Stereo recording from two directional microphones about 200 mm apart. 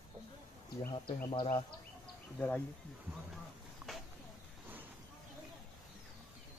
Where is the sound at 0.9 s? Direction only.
25° left (ahead or behind).